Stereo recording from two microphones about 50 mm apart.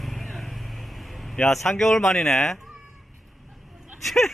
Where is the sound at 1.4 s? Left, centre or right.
Centre.